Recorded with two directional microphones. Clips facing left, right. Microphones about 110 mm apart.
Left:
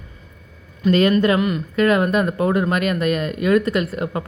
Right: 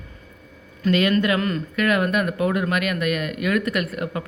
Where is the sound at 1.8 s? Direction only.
30° left (ahead or behind).